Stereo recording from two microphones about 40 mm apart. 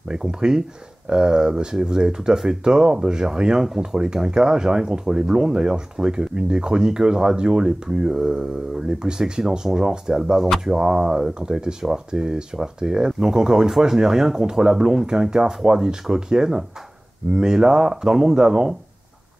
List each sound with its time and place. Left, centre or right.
0.1 s speech: centre